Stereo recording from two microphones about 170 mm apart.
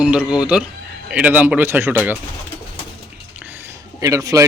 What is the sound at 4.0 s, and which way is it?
Speech, 20° right (ahead or behind).